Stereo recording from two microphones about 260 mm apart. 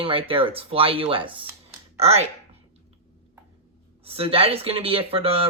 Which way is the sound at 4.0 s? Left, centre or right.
Right.